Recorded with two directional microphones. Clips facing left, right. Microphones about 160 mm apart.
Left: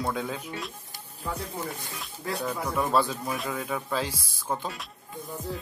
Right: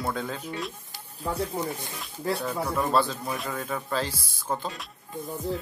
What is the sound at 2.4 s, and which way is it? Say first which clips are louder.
Speech: right 1 dB; 10° left (ahead or behind).